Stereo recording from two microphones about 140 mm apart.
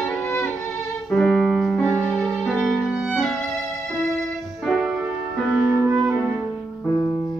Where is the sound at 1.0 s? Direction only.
5° left (ahead or behind).